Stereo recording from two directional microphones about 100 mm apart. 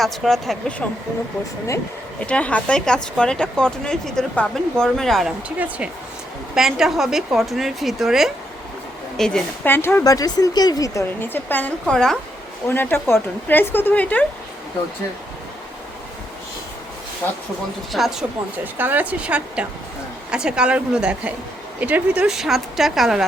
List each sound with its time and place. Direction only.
0.0 s speech: centre (ahead or behind)
2.2 s speech: 10° left (ahead or behind)
5.5 s a woman's voice: 15° right (ahead or behind); by 9.4 s 5° left (ahead or behind)
9.6 s speech: 25° left (ahead or behind)
10.0 s speech: 40° left (ahead or behind)
11.2 s speech: 20° left (ahead or behind)
11.9 s speech: 5° left (ahead or behind)
12.6 s speech: 20° left (ahead or behind)
17.9 s speech: 5° right (ahead or behind)
18.6 s a woman's voice: 20° right (ahead or behind); by 23.2 s 5° right (ahead or behind)